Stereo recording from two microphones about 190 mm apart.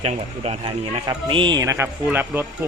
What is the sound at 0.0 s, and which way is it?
A man's voice, 25° right (ahead or behind).